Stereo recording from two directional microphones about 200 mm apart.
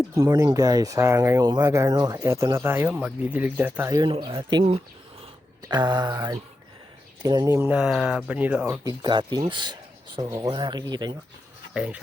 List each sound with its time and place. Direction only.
0.1 s speech: 15° right (ahead or behind)
11.7 s speech: 5° right (ahead or behind)